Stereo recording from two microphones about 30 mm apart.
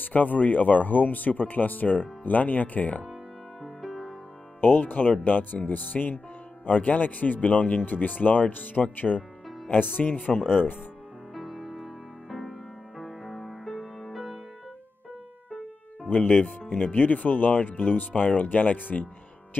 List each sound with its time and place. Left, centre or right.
0.1 s speech: left
3.6 s music: centre
4.6 s speech: left
5.2 s speech: left
6.6 s speech: left
7.8 s speech: left
8.8 s speech: left
10.0 s speech: left
10.4 s speech: right
11.3 s music: centre
16.1 s speech: left
16.4 s speech: left
16.8 s speech: left